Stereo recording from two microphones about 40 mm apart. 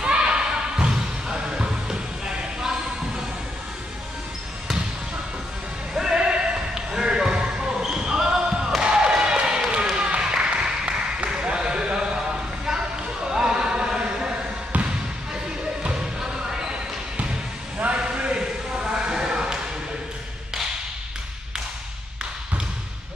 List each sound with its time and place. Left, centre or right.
0.0 s music: right
5.9 s basketball bounce: centre
9.9 s a sound: right
13.3 s chant: centre
15.8 s music: centre
17.9 s a sound: right